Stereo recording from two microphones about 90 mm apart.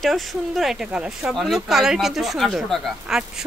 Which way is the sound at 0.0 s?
Centre (ahead or behind).